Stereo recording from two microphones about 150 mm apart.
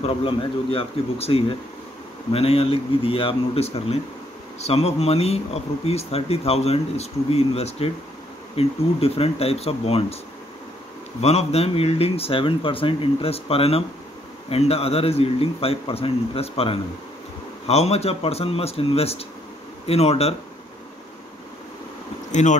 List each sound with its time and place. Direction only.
0.0 s speech: 35° left (ahead or behind)
11.1 s speech: 45° left (ahead or behind)
22.3 s speech: 55° left (ahead or behind)